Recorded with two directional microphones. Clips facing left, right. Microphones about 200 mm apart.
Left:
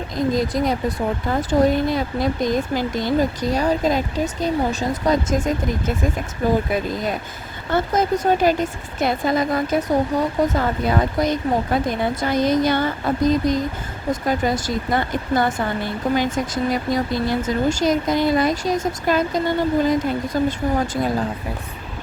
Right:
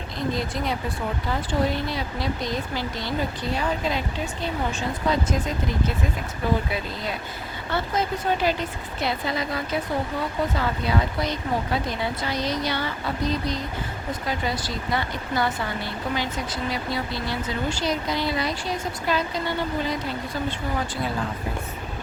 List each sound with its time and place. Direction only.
0.3 s speech: 40° left (ahead or behind)